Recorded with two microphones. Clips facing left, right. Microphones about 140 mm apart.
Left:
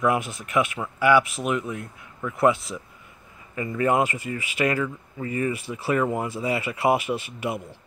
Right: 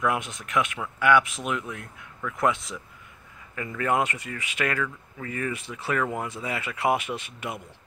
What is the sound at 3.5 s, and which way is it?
Speech, 15° left (ahead or behind).